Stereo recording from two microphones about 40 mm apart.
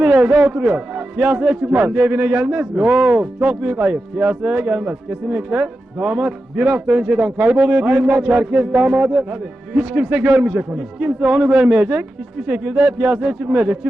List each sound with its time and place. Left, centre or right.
0.0 s a man's voice: right
10.8 s speech: right